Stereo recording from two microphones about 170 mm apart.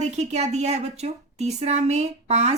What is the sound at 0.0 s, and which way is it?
A woman's voice, 40° right (ahead or behind).